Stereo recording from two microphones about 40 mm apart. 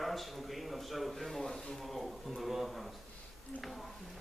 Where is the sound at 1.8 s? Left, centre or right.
Centre.